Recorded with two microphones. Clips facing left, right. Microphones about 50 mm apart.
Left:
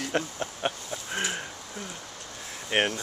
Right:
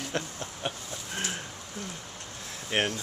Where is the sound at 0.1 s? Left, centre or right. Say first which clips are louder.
Left 4 dB; left.